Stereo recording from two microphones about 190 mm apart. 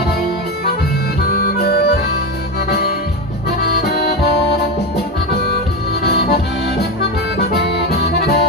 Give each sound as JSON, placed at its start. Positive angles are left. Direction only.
{"t": 1.3, "sound": "music", "side_deg": 55}
{"t": 7.9, "sound": "music", "side_deg": 55}